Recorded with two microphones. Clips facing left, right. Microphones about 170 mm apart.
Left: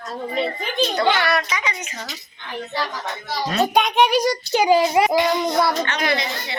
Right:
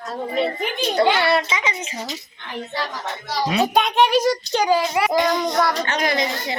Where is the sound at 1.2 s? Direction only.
25° right (ahead or behind).